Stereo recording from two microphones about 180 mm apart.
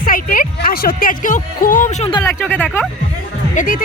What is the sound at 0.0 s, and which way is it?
Speech, 50° left (ahead or behind).